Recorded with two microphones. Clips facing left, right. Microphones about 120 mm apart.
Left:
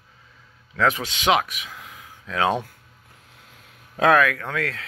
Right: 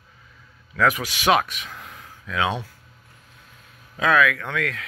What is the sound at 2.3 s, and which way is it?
Speech, 40° left (ahead or behind).